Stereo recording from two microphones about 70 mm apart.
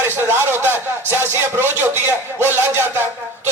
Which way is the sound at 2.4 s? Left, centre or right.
Right.